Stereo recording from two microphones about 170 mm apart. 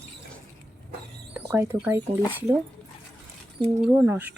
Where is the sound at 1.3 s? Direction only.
15° right (ahead or behind).